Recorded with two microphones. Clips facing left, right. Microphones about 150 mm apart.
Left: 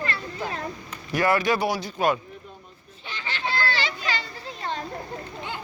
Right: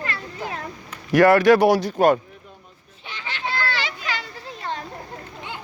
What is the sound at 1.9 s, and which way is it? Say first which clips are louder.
Speech: right 6 dB; 55° right (ahead or behind).